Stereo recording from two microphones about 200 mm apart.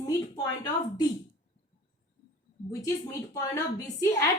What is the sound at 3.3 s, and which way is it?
Speech, 15° left (ahead or behind).